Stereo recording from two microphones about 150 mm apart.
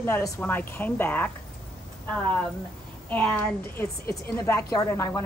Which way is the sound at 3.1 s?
10° left (ahead or behind).